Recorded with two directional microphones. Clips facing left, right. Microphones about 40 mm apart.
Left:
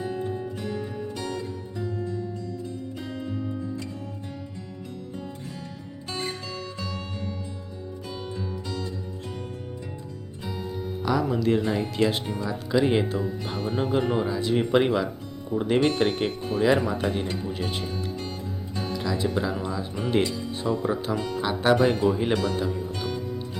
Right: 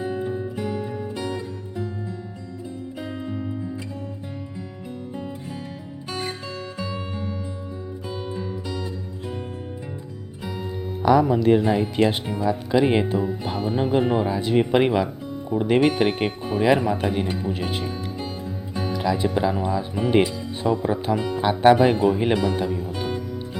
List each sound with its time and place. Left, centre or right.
0.0 s music: centre
3.0 s music: centre
6.1 s music: centre
8.1 s music: centre
11.0 s speech: right
12.1 s speech: centre
12.5 s speech: right
14.5 s speech: right
18.7 s music: centre
18.9 s speech: right
22.4 s speech: centre